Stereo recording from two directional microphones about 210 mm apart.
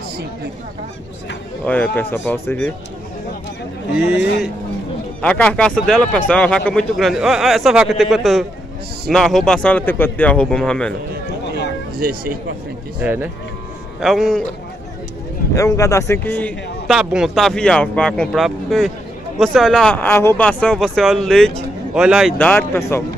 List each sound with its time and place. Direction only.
1.7 s speech: 10° left (ahead or behind)
5.2 s speech: 5° left (ahead or behind)
11.5 s a sound: 45° right (ahead or behind)
13.0 s speech: 10° right (ahead or behind)
15.5 s speech: 15° left (ahead or behind)